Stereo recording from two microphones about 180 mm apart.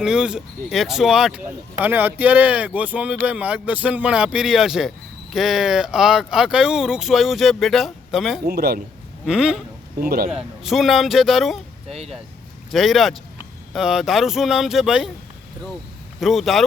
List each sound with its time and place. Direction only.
0.0 s speech: 5° right (ahead or behind)
8.4 s a man's voice: 60° right (ahead or behind)
9.2 s speech: 5° right (ahead or behind)
10.0 s a man's voice: 55° right (ahead or behind)
10.3 s speech: centre (ahead or behind)
11.9 s speech: 35° right (ahead or behind)
12.7 s speech: centre (ahead or behind)
16.2 s speech: centre (ahead or behind)